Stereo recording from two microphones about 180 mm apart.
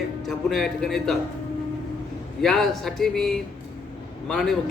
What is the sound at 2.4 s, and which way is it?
A man's voice, centre (ahead or behind).